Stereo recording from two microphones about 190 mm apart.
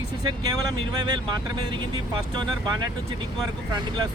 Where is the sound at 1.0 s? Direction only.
20° right (ahead or behind).